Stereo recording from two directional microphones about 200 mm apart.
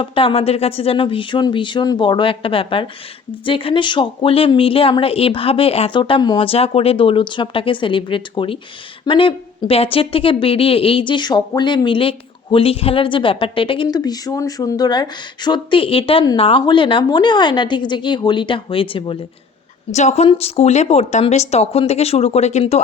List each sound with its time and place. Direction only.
0.0 s a woman's voice: 25° left (ahead or behind)